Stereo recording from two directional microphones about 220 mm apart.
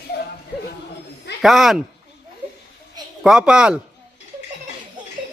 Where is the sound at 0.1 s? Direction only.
45° left (ahead or behind).